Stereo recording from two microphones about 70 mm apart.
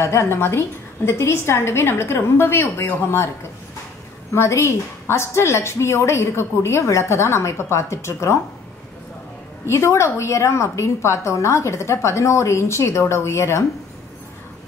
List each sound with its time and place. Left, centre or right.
0.0 s a woman's voice: left
4.3 s a woman's voice: left
9.7 s a woman's voice: left